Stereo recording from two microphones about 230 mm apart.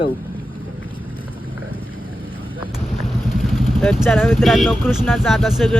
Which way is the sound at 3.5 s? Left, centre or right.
Centre.